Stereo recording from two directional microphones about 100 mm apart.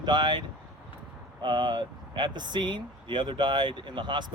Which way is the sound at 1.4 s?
50° right (ahead or behind).